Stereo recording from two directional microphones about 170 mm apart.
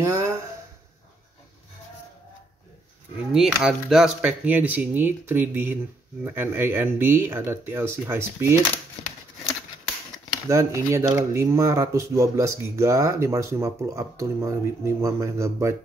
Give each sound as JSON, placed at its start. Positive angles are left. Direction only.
{"t": 0.0, "sound": "a sound", "side_deg": -15}
{"t": 3.3, "sound": "speech", "side_deg": 0}
{"t": 10.5, "sound": "speech", "side_deg": -15}